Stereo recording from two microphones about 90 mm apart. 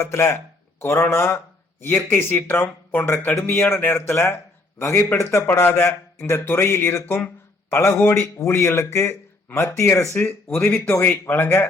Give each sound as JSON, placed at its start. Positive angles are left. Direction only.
{"t": 0.0, "sound": "speech", "side_deg": 30}